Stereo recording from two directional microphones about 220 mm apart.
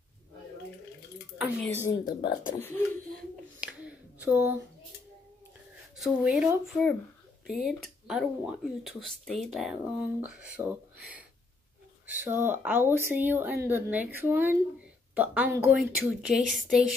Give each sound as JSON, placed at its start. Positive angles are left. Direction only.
{"t": 1.9, "sound": "speech", "side_deg": 15}
{"t": 3.6, "sound": "finger snapping", "side_deg": -5}
{"t": 6.0, "sound": "speech", "side_deg": -5}
{"t": 12.1, "sound": "speech", "side_deg": -10}